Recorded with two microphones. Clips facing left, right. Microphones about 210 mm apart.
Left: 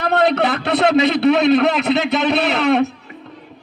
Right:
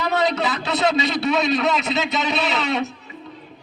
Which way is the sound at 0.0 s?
60° left (ahead or behind).